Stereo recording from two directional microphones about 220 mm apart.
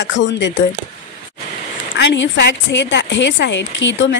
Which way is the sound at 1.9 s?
55° left (ahead or behind).